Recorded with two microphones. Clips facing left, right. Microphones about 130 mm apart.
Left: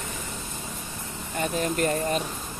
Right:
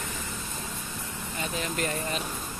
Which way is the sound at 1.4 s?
45° left (ahead or behind).